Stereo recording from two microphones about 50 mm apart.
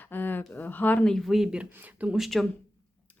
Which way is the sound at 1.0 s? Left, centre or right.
Centre.